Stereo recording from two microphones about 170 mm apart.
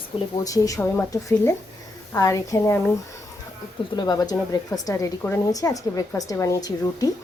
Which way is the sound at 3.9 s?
25° left (ahead or behind).